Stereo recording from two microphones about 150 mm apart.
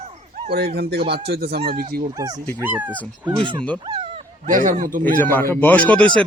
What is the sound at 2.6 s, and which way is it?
Speech, 10° right (ahead or behind).